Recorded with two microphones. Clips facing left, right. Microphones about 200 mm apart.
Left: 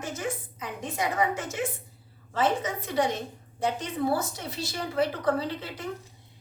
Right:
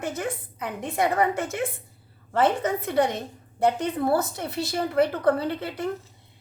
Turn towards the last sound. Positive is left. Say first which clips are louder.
# right 3 dB
turn(degrees=-60)  # may be behind; listen again after turning